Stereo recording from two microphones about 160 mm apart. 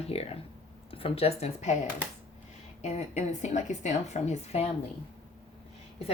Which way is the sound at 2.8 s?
45° left (ahead or behind).